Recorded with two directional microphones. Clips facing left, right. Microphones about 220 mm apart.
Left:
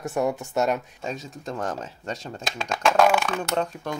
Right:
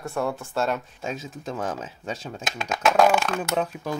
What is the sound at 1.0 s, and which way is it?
Speech, centre (ahead or behind).